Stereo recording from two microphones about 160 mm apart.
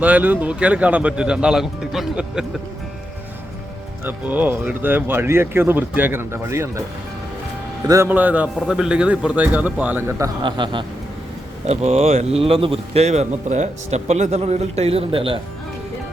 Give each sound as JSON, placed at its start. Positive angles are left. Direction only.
{"t": 0.0, "sound": "speech", "side_deg": -10}
{"t": 4.0, "sound": "speech", "side_deg": -10}
{"t": 7.9, "sound": "speech", "side_deg": -15}
{"t": 11.6, "sound": "speech", "side_deg": -40}